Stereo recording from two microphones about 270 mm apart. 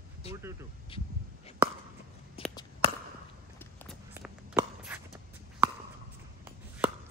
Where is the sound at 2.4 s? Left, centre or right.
Left.